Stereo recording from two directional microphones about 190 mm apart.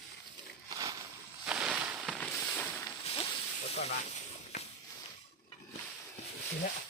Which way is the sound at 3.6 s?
35° left (ahead or behind).